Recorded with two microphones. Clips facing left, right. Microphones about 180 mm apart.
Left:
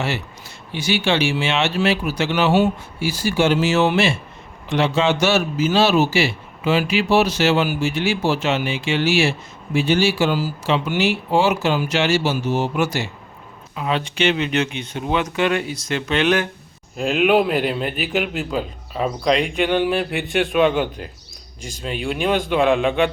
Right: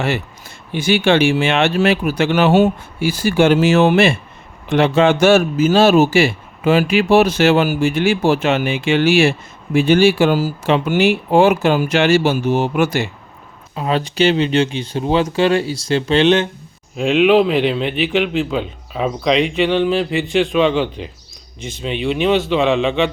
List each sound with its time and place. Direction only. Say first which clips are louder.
0.0 s speech: right 4 dB; 50° right (ahead or behind)
13.7 s speech: right 5 dB; 40° right (ahead or behind)
17.0 s a man's voice: right 4 dB; 5° left (ahead or behind)
22.0 s a man's voice: right 5 dB; 10° left (ahead or behind)